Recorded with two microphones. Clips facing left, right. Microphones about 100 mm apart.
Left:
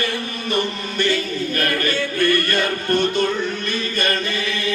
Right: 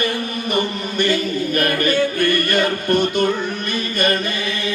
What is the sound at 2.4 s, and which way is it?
Music, 15° right (ahead or behind).